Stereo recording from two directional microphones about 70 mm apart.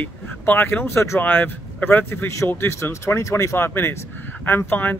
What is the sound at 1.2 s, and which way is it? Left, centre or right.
Speech, left.